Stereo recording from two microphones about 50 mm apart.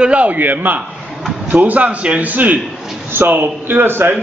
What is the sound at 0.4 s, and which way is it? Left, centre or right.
A man's voice, right.